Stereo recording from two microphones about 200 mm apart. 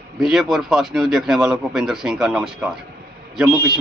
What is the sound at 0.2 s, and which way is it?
A man's voice, centre (ahead or behind).